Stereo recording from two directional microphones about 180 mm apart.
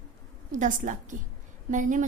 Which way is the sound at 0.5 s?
45° right (ahead or behind).